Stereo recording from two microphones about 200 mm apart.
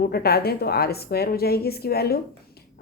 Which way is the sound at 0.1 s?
50° left (ahead or behind).